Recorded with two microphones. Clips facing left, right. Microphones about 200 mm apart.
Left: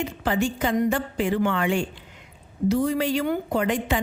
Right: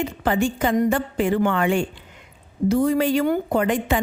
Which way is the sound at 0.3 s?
50° right (ahead or behind).